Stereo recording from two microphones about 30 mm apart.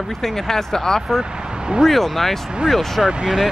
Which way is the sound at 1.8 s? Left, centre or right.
Centre.